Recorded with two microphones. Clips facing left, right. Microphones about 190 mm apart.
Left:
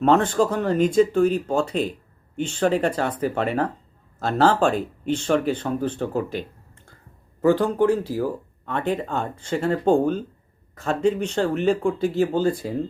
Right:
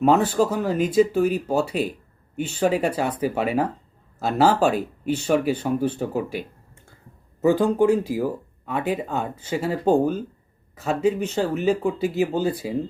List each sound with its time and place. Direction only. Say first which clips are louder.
0.0 s speech: even; 5° right (ahead or behind)
7.4 s speech: even; 10° right (ahead or behind)